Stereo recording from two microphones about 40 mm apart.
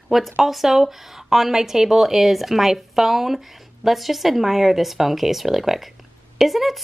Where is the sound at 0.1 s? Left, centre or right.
Centre.